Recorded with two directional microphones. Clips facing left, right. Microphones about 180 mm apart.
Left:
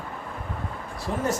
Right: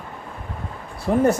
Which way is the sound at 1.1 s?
55° right (ahead or behind).